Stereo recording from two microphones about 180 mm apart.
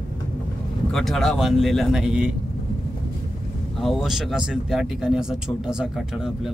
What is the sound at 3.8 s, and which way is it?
Speech, centre (ahead or behind).